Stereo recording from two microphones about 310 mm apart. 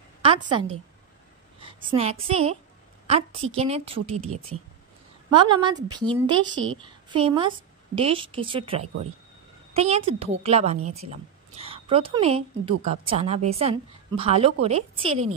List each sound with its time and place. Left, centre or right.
0.2 s a woman's voice: centre